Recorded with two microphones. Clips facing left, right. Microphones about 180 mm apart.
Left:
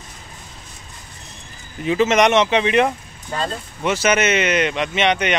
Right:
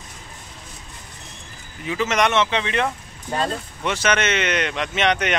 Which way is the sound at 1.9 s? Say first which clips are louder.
Left 6 dB; 20° left (ahead or behind).